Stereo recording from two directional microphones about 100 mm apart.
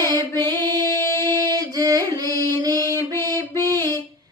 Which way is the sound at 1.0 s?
25° left (ahead or behind).